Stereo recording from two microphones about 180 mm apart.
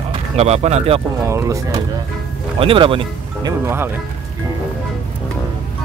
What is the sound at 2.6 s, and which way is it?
Speech, 30° right (ahead or behind).